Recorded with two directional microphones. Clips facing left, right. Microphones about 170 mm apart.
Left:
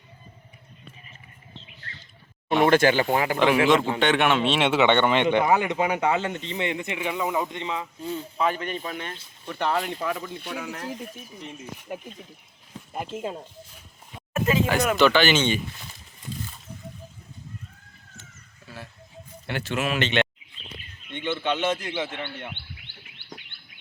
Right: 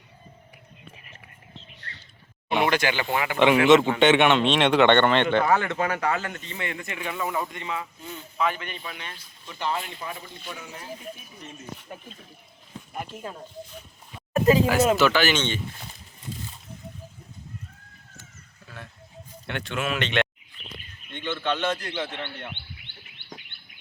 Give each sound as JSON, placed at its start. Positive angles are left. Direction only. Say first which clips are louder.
{"t": 2.6, "sound": "speech", "louder": "left 9 dB", "side_deg": 45}
{"t": 3.3, "sound": "a man's voice", "louder": "right 4 dB", "side_deg": 0}
{"t": 8.0, "sound": "speech", "louder": "left 2 dB", "side_deg": 30}
{"t": 9.5, "sound": "speech", "louder": "left 3 dB", "side_deg": 60}
{"t": 9.7, "sound": "speech", "louder": "left 5 dB", "side_deg": 40}
{"t": 10.0, "sound": "speech", "louder": "left 7 dB", "side_deg": 75}
{"t": 11.4, "sound": "a man's voice", "louder": "left 2 dB", "side_deg": 15}
{"t": 12.9, "sound": "speech", "louder": "left 5 dB", "side_deg": 25}
{"t": 14.3, "sound": "a sound", "louder": "right 5 dB", "side_deg": -35}
{"t": 14.9, "sound": "speech", "louder": "left 2 dB", "side_deg": -5}
{"t": 15.4, "sound": "a man's voice", "louder": "left 4 dB", "side_deg": 10}
{"t": 19.5, "sound": "speech", "louder": "left 2 dB", "side_deg": 5}
{"t": 21.2, "sound": "a man's voice", "louder": "left 1 dB", "side_deg": 15}